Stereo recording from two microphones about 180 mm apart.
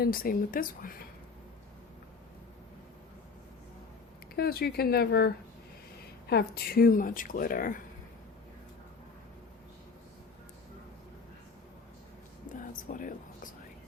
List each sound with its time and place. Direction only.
0.0 s speech: 55° left (ahead or behind)
4.4 s speech: 60° left (ahead or behind)
12.9 s speech: 50° left (ahead or behind)